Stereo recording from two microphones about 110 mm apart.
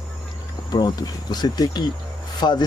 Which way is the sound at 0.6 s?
40° left (ahead or behind).